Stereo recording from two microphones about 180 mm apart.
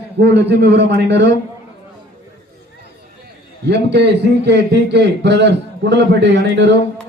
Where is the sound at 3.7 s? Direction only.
70° right (ahead or behind).